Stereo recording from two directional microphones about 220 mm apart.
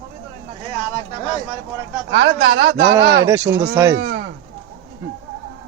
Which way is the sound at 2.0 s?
50° right (ahead or behind).